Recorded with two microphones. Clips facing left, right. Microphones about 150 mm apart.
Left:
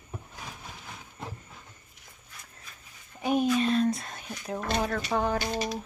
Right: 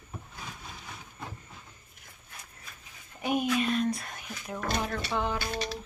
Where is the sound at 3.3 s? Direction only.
30° left (ahead or behind).